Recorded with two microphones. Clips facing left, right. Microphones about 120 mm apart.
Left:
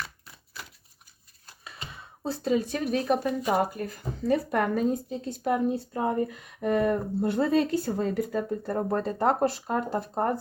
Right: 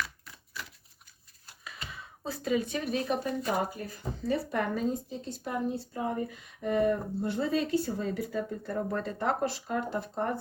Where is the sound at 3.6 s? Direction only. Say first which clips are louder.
Left 5 dB; 55° left (ahead or behind).